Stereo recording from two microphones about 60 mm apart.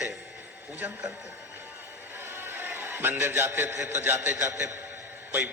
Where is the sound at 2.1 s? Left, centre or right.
Right.